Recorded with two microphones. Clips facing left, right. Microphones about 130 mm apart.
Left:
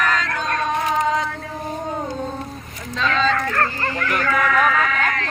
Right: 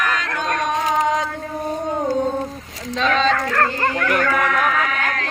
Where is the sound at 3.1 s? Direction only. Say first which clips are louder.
Right 2 dB; 80° right.